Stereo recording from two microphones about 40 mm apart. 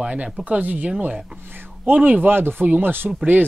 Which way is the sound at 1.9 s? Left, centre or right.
Right.